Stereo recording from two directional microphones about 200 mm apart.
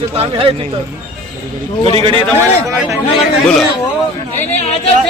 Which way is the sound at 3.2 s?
Centre (ahead or behind).